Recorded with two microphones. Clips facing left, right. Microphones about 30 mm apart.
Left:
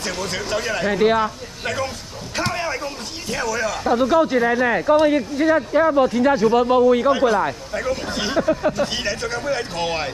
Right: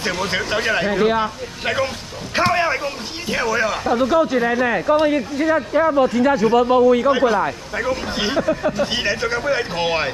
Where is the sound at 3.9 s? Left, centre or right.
Centre.